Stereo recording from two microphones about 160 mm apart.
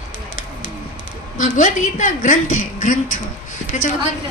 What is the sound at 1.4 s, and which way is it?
A woman's voice, 50° left (ahead or behind).